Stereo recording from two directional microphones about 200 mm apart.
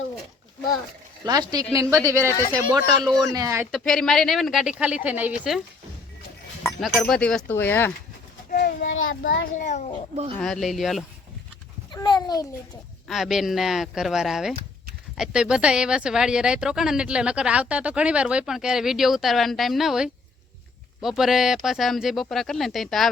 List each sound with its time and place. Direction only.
1.2 s speech: 20° right (ahead or behind)
2.3 s speech: 15° left (ahead or behind)
3.1 s speech: 15° right (ahead or behind)
3.7 s speech: centre (ahead or behind)
8.4 s child singing: 45° left (ahead or behind)
9.3 s a child's voice: 75° left (ahead or behind)
9.6 s a child's voice: 35° left (ahead or behind)
10.4 s speech: centre (ahead or behind)
11.9 s a sound: 20° left (ahead or behind)
13.1 s speech: centre (ahead or behind)